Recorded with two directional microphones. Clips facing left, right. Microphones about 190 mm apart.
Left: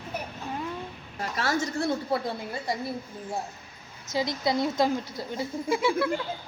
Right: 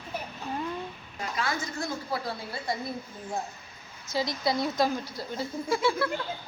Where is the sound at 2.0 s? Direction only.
25° left (ahead or behind).